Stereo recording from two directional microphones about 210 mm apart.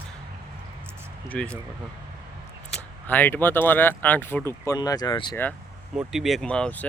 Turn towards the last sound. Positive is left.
turn(degrees=5)  # may be behind; listen again after turning